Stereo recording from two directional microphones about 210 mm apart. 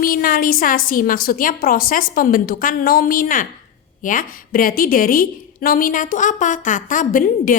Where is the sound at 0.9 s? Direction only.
40° left (ahead or behind).